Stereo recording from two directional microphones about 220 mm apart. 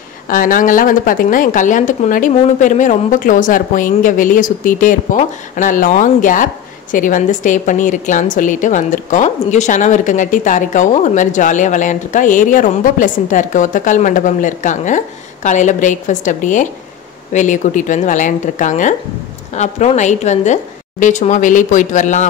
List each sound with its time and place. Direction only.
0.3 s speech: 40° left (ahead or behind)